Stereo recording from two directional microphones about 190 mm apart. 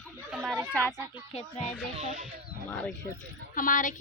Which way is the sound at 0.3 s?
5° right (ahead or behind).